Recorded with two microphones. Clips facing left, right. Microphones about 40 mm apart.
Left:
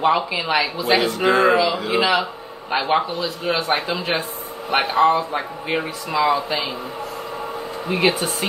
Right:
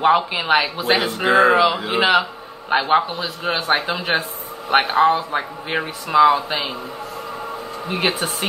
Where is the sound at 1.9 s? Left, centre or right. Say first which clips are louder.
Right 1 dB; right.